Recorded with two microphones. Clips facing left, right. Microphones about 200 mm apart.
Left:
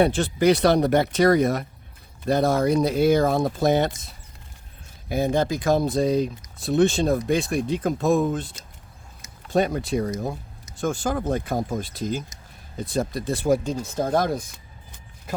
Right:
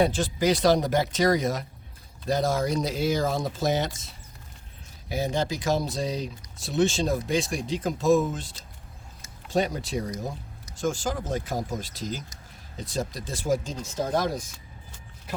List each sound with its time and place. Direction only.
0.0 s speech: 65° left (ahead or behind)
9.5 s speech: 55° left (ahead or behind)